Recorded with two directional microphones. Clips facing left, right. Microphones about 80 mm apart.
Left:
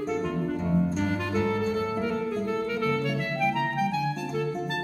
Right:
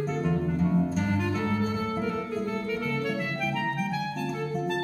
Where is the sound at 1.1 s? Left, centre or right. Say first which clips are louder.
Left 1 dB; centre.